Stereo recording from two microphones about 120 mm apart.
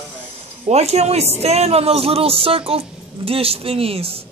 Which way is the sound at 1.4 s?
60° right (ahead or behind).